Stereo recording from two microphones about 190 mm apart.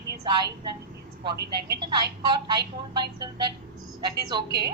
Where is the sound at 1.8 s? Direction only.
25° right (ahead or behind).